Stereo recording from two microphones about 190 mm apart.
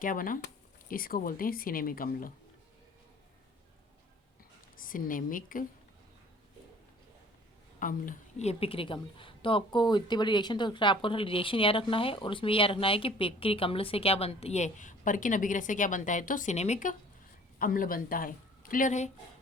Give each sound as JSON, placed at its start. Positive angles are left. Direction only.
{"t": 0.0, "sound": "speech", "side_deg": 45}
{"t": 4.8, "sound": "speech", "side_deg": 45}
{"t": 7.8, "sound": "a woman's voice", "side_deg": 45}
{"t": 17.6, "sound": "a woman's voice", "side_deg": 50}